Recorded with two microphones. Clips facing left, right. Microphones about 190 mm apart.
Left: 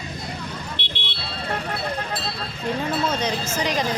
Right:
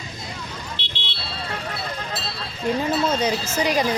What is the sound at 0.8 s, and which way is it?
Vehicle, 55° left (ahead or behind).